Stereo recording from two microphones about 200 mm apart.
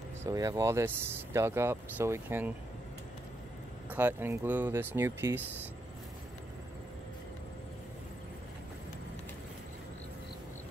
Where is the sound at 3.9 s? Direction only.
10° right (ahead or behind).